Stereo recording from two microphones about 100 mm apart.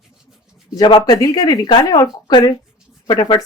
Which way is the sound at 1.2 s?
40° left (ahead or behind).